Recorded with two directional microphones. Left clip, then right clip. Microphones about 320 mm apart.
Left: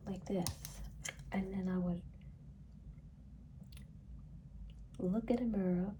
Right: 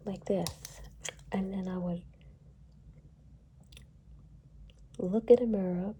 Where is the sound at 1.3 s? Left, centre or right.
Right.